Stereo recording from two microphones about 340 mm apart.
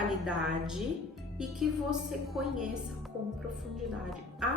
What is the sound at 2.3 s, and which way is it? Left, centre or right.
Speech, centre.